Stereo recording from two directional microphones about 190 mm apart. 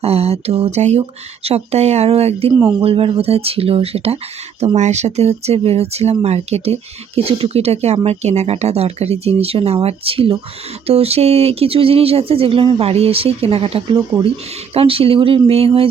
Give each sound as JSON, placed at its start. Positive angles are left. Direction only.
{"t": 0.0, "sound": "speech", "side_deg": -30}